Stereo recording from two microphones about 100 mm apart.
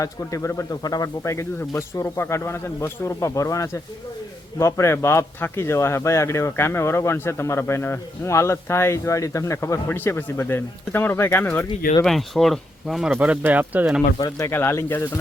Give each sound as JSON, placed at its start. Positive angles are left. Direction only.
{"t": 0.0, "sound": "speech", "side_deg": 35}
{"t": 12.0, "sound": "speech", "side_deg": 0}
{"t": 13.1, "sound": "speech", "side_deg": -15}
{"t": 14.3, "sound": "speech", "side_deg": 25}